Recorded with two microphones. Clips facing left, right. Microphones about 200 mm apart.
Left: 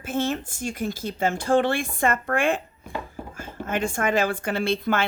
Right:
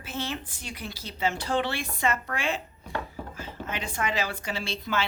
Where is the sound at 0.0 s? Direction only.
50° left (ahead or behind).